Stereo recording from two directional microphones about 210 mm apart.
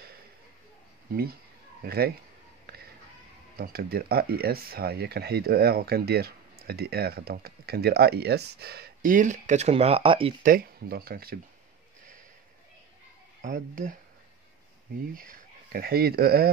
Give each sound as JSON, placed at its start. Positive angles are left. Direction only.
{"t": 1.8, "sound": "speech", "side_deg": -45}
{"t": 3.5, "sound": "speech", "side_deg": -45}
{"t": 10.4, "sound": "speech", "side_deg": -45}
{"t": 13.4, "sound": "speech", "side_deg": -40}
{"t": 15.1, "sound": "speech", "side_deg": -40}